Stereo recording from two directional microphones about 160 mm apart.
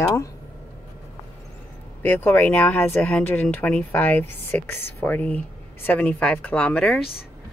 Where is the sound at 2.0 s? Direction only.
10° left (ahead or behind).